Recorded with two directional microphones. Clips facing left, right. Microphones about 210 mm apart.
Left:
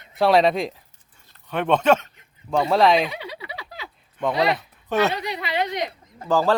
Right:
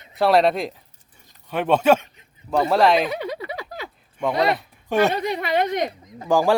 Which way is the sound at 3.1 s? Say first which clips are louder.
Right 7 dB; 45° right (ahead or behind).